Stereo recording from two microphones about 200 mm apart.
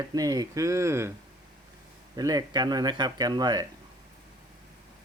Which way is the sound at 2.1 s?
20° right (ahead or behind).